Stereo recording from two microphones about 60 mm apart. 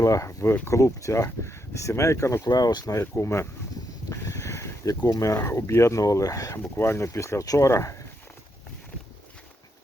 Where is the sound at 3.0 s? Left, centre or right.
Left.